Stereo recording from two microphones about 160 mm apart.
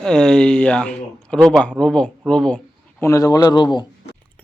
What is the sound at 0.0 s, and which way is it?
A man's voice, 5° left (ahead or behind).